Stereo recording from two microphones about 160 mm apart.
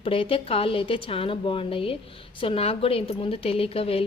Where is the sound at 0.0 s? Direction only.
35° left (ahead or behind).